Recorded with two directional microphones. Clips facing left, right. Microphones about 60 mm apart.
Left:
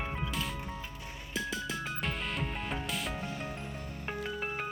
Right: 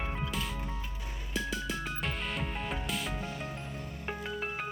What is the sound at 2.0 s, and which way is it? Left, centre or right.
Music, centre.